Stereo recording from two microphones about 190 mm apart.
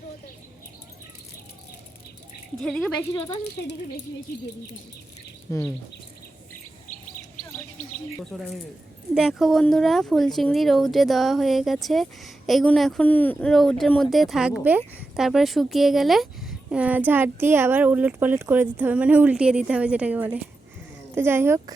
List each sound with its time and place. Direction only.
2.6 s speech: 5° left (ahead or behind)
3.1 s a woman's voice: 20° left (ahead or behind)
4.3 s speech: 55° left (ahead or behind)
5.5 s speech: 15° left (ahead or behind)
7.8 s bird: 50° left (ahead or behind)
8.2 s speech: centre (ahead or behind)